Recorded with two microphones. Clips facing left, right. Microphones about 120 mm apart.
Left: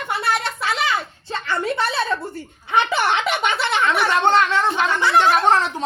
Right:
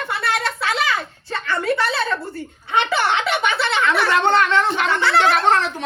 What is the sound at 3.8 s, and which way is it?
Speech, 20° left (ahead or behind).